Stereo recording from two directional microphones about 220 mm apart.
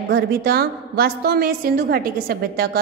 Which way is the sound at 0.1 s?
45° right (ahead or behind).